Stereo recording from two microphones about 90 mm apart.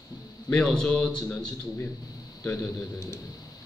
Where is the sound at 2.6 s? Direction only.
35° left (ahead or behind).